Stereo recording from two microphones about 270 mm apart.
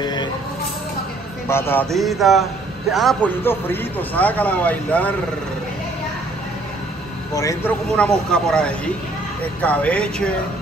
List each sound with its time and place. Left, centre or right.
0.0 s vehicle: centre
1.5 s a man's voice: centre
7.3 s a man's voice: centre